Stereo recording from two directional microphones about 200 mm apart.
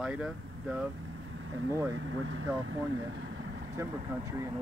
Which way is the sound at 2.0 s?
85° right.